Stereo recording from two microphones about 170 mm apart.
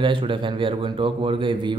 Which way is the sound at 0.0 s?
30° right (ahead or behind).